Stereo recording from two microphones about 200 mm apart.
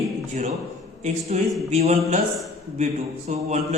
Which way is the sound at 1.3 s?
35° right (ahead or behind).